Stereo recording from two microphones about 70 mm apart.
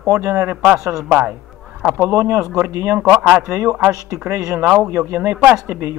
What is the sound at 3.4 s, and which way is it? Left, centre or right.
Speech, right.